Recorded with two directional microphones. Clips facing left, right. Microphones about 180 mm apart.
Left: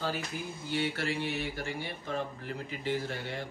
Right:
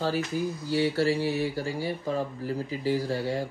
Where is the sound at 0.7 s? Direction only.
35° right (ahead or behind).